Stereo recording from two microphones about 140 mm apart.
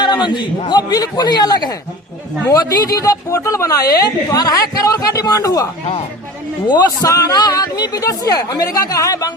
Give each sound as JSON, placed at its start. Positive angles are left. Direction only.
{"t": 0.0, "sound": "a sound", "side_deg": 30}
{"t": 0.7, "sound": "a man's voice", "side_deg": 30}
{"t": 6.7, "sound": "a man's voice", "side_deg": 30}